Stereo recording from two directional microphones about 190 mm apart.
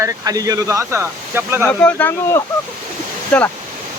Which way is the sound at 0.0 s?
20° right (ahead or behind).